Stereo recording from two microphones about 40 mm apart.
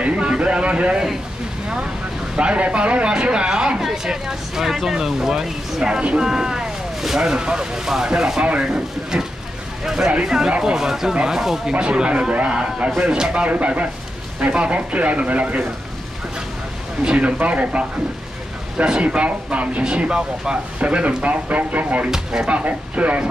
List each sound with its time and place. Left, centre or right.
0.0 s a sound: right
2.3 s speech: right; by 7.2 s centre
7.2 s speech: right
10.2 s speech: centre
11.8 s speech: right
17.0 s speech: right
17.4 s speech: right
20.0 s speech: right
22.1 s speech: centre
22.7 s speech: right